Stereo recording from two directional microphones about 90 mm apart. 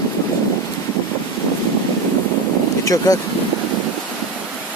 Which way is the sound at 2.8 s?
40° left (ahead or behind).